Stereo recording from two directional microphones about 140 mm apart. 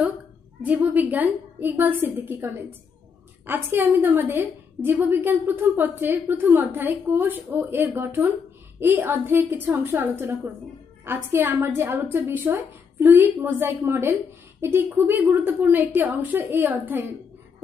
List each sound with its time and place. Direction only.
0.7 s a woman's voice: 10° right (ahead or behind)